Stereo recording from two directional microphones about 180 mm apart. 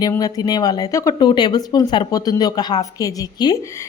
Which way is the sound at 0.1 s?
20° left (ahead or behind).